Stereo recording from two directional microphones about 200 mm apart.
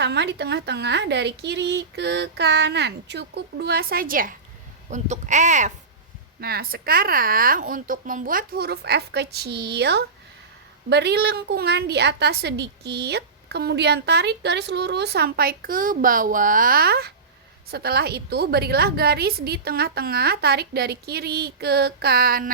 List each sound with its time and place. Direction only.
0.0 s a woman's voice: 55° right (ahead or behind); by 5.7 s 35° right (ahead or behind)
6.4 s a woman's voice: 50° right (ahead or behind)